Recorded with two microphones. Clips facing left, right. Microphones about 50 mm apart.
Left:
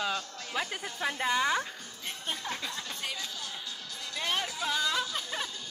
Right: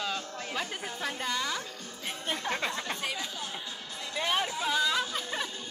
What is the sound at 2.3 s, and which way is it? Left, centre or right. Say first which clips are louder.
Speech: right 6 dB; right.